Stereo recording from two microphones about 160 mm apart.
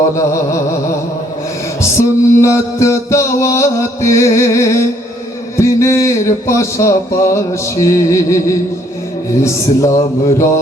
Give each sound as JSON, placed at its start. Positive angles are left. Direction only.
{"t": 2.0, "sound": "mantra", "side_deg": 15}
{"t": 5.5, "sound": "a sound", "side_deg": 15}
{"t": 9.4, "sound": "mantra", "side_deg": 15}